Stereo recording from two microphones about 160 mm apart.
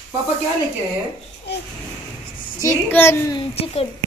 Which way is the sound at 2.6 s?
15° left (ahead or behind).